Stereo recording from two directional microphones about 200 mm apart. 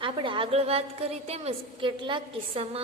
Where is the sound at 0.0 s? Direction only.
25° right (ahead or behind).